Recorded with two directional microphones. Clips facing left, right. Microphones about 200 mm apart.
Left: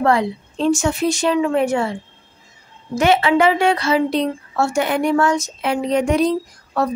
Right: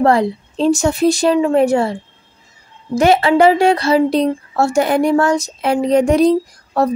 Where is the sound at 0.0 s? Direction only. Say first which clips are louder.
Right 4 dB; 35° right (ahead or behind).